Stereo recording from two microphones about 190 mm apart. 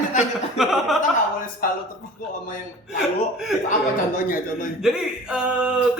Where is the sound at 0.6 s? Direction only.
Centre (ahead or behind).